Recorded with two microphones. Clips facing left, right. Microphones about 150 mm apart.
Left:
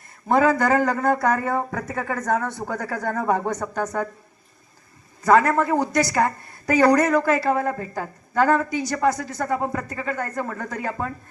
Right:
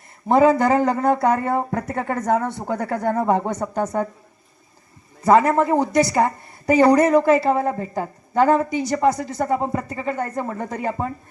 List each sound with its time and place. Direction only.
0.3 s a woman's voice: 25° right (ahead or behind)
5.2 s a woman's voice: 25° right (ahead or behind)